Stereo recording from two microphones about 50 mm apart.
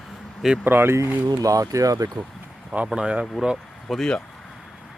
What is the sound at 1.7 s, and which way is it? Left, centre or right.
Speech, right.